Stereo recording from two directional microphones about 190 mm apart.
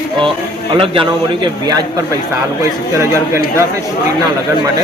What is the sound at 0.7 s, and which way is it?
A man's voice, 25° right (ahead or behind).